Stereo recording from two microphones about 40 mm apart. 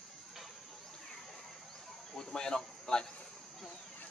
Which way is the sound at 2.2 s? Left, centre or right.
Centre.